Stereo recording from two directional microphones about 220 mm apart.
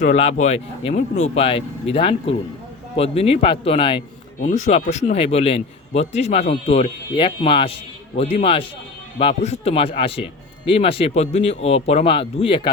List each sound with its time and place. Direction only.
0.0 s a man's voice: 30° left (ahead or behind)
4.4 s a man's voice: 35° left (ahead or behind)